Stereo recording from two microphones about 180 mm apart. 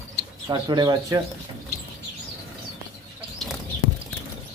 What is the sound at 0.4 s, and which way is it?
Speech, 25° right (ahead or behind).